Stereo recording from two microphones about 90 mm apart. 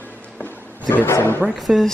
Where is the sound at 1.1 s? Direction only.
25° left (ahead or behind).